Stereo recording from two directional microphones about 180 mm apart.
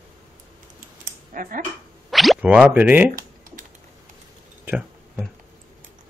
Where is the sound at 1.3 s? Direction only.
50° right (ahead or behind).